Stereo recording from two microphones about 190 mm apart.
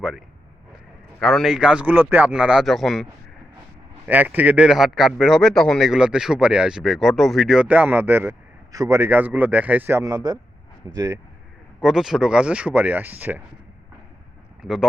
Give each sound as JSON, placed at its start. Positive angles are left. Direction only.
{"t": 1.2, "sound": "a man's voice", "side_deg": 0}
{"t": 11.8, "sound": "speech", "side_deg": 0}
{"t": 14.6, "sound": "speech", "side_deg": -5}